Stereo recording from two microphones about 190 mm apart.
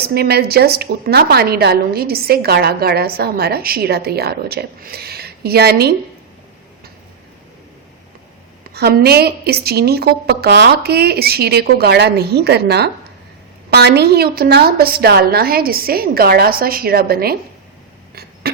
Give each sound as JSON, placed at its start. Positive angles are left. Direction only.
{"t": 0.0, "sound": "a woman's voice", "side_deg": -55}
{"t": 8.7, "sound": "a woman's voice", "side_deg": -55}
{"t": 18.1, "sound": "a sound", "side_deg": -55}